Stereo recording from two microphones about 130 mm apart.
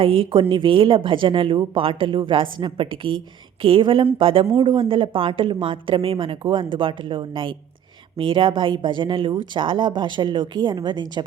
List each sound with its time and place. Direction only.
0.0 s a woman's voice: 45° right (ahead or behind)